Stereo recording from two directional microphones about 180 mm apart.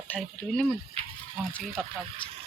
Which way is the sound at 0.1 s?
5° left (ahead or behind).